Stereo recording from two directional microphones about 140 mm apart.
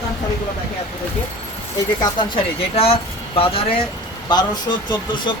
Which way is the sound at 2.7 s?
45° left (ahead or behind).